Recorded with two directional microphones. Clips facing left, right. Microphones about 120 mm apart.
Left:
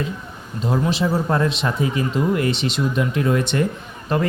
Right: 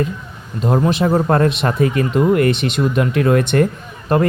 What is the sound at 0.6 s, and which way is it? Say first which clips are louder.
Speech: right 5 dB; 55° right (ahead or behind).